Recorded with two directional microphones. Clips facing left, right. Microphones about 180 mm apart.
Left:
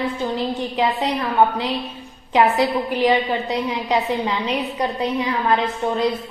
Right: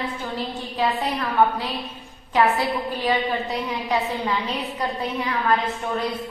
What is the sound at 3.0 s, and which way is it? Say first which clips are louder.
A woman's voice: left 6 dB; 20° left (ahead or behind).